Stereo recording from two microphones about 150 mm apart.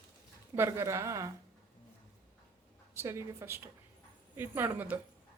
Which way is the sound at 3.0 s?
15° right (ahead or behind).